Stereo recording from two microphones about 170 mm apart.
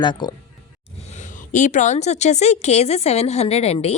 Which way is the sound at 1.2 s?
45° left (ahead or behind).